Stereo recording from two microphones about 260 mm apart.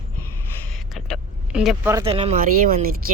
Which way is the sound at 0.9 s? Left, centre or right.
Centre.